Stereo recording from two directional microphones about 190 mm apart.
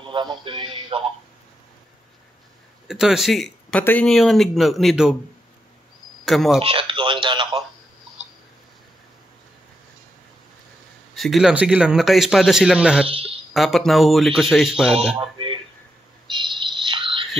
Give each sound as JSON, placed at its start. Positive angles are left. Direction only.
{"t": 0.0, "sound": "speech", "side_deg": -25}
{"t": 2.9, "sound": "a man's voice", "side_deg": -5}
{"t": 6.2, "sound": "a man's voice", "side_deg": 0}
{"t": 6.6, "sound": "speech", "side_deg": -30}
{"t": 11.1, "sound": "a man's voice", "side_deg": 0}
{"t": 13.0, "sound": "a sound", "side_deg": -30}
{"t": 13.5, "sound": "a man's voice", "side_deg": 0}
{"t": 15.1, "sound": "speech", "side_deg": -25}
{"t": 16.3, "sound": "a sound", "side_deg": -25}